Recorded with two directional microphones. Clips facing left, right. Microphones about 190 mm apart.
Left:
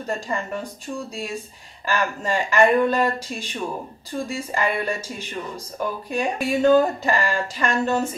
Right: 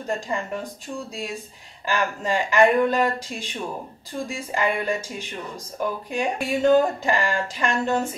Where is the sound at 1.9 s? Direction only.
15° right (ahead or behind).